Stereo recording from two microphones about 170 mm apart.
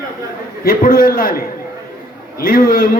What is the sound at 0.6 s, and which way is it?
A man's voice, 60° left (ahead or behind).